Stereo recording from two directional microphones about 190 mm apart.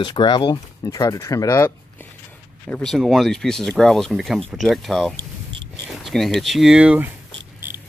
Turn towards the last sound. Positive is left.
turn(degrees=-10)  # may be behind; listen again after turning